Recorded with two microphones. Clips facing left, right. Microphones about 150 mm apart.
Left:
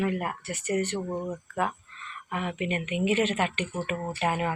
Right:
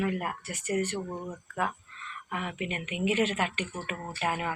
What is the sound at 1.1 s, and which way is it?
Speech, 15° left (ahead or behind).